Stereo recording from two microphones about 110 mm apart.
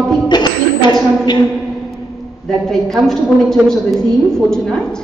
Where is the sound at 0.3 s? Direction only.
40° left (ahead or behind).